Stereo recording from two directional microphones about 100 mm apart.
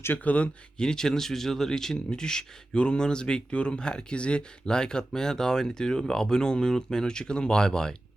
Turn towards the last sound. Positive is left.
turn(degrees=5)  # may be behind; listen again after turning